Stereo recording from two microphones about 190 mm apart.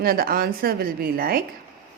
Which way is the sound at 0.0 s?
50° right (ahead or behind).